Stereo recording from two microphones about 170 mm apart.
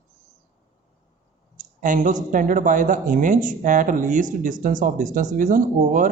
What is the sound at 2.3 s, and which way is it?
Speech, 50° right (ahead or behind).